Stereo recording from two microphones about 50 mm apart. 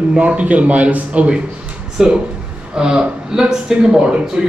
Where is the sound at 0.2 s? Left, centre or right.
Right.